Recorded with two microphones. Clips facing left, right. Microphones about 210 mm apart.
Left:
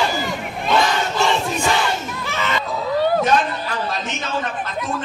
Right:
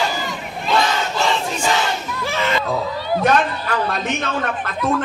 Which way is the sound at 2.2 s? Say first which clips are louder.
Right 5 dB; 30° right (ahead or behind).